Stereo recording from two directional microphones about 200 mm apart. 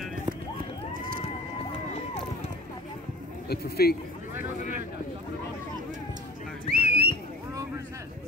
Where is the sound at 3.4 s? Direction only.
50° left (ahead or behind).